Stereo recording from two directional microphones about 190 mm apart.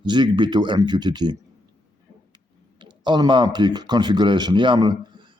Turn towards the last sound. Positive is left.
turn(degrees=-25)  # may be behind; listen again after turning